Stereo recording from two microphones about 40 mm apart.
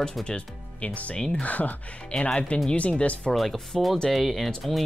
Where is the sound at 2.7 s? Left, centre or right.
Left.